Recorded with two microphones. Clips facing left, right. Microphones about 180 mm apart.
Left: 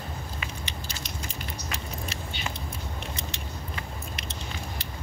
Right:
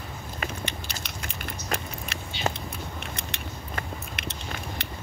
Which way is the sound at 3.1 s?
60° right (ahead or behind).